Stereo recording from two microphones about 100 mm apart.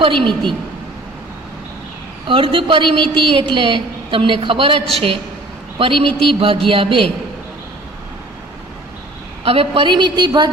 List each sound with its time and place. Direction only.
0.0 s a woman's voice: 60° right (ahead or behind)
2.2 s a woman's voice: 60° right (ahead or behind)
5.8 s a woman's voice: 65° right (ahead or behind)
9.4 s a woman's voice: 70° right (ahead or behind); by 10.5 s 45° right (ahead or behind)